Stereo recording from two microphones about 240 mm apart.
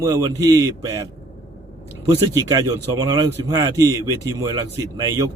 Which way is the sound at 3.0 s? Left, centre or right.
Centre.